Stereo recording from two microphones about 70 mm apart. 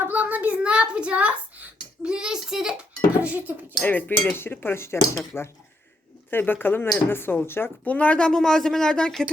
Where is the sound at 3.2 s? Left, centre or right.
Right.